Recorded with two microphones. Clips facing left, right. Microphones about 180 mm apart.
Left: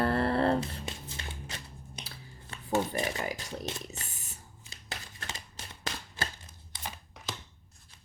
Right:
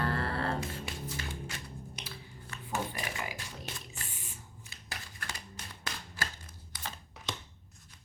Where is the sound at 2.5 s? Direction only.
30° left (ahead or behind).